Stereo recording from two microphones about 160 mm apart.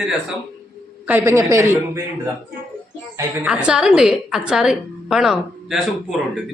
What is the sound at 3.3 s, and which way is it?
A woman's voice, 5° right (ahead or behind).